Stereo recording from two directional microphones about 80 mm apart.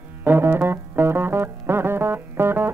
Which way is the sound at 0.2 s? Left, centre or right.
Right.